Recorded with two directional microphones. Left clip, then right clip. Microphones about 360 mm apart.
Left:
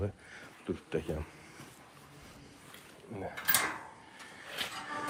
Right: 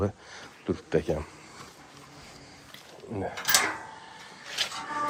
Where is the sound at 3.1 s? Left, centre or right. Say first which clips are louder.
Right 8 dB; right.